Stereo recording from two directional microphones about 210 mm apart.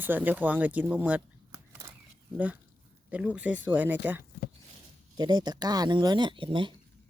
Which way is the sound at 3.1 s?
5° right (ahead or behind).